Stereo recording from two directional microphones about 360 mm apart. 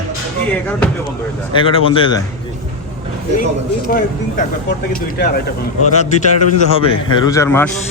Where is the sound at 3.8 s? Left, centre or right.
Left.